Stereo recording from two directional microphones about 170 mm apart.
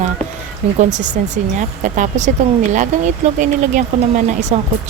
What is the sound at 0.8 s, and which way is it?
A woman's voice, 45° right (ahead or behind).